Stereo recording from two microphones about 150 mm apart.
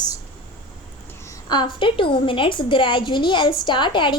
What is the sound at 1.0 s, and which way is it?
A woman's voice, 20° left (ahead or behind).